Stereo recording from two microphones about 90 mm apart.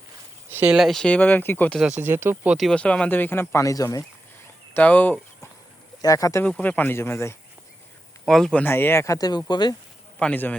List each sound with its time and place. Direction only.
0.7 s speech: centre (ahead or behind)
1.0 s speech: 15° left (ahead or behind)
2.0 s speech: 25° right (ahead or behind)
2.7 s speech: 15° left (ahead or behind); by 4.0 s 40° left (ahead or behind)
4.7 s speech: 15° left (ahead or behind)
6.0 s speech: 40° left (ahead or behind)
6.6 s speech: 20° left (ahead or behind)
8.3 s speech: 5° left (ahead or behind)
8.6 s speech: 25° left (ahead or behind)
9.1 s speech: 50° left (ahead or behind)
10.2 s a man's voice: 10° left (ahead or behind)